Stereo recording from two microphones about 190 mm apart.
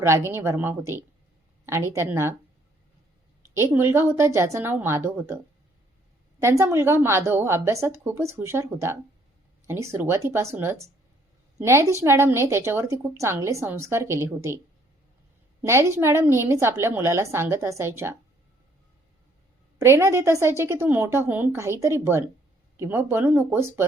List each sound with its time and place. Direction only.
0.0 s a woman's voice: 15° right (ahead or behind)
3.5 s a woman's voice: 10° right (ahead or behind)
6.4 s a woman's voice: 15° right (ahead or behind)
15.6 s a woman's voice: 15° right (ahead or behind)
19.8 s a woman's voice: 15° right (ahead or behind)